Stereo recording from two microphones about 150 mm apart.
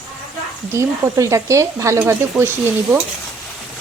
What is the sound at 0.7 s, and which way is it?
Speech, 20° right (ahead or behind).